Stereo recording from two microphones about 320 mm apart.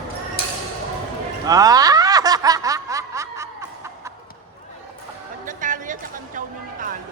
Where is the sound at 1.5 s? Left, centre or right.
Centre.